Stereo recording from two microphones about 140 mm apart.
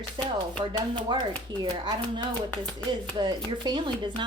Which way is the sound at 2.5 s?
5° left (ahead or behind).